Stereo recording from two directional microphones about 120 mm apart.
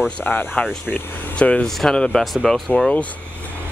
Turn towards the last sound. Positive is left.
turn(degrees=10)  # may be behind; listen again after turning